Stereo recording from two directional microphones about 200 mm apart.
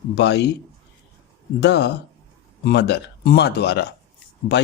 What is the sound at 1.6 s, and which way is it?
Speech, 55° left (ahead or behind).